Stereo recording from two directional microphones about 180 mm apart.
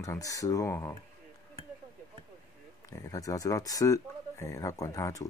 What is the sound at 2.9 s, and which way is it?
Speech, 20° left (ahead or behind).